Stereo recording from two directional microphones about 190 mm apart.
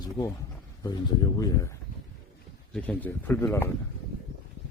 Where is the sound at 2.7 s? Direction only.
5° left (ahead or behind).